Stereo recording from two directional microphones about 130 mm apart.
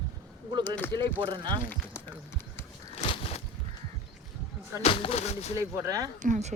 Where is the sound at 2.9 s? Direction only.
55° left (ahead or behind).